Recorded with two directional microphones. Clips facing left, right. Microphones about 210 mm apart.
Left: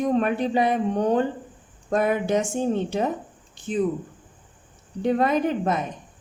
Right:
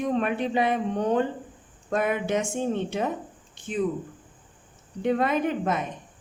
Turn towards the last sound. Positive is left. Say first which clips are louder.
# left 3 dB
turn(degrees=35)  # may be behind; listen again after turning